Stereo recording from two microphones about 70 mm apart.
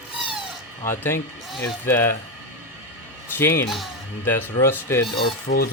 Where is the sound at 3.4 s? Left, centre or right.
Left.